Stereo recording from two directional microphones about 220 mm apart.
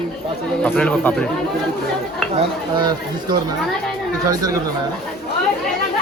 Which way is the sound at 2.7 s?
20° right (ahead or behind).